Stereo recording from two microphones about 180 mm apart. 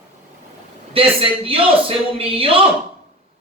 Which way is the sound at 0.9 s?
30° right (ahead or behind).